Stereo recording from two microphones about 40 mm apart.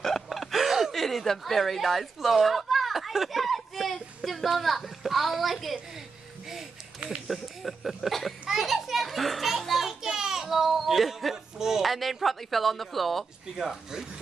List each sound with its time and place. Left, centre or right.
0.0 s a sound: centre
0.9 s speech: centre
7.2 s speech: centre
9.6 s children playing: centre
11.8 s speech: centre